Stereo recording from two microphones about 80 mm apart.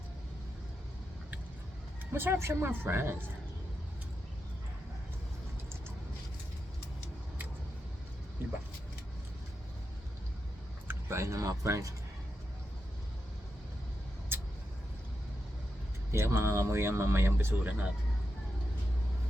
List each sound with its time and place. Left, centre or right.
2.1 s speech: right
10.8 s speech: right
14.3 s vehicle: right
16.1 s speech: right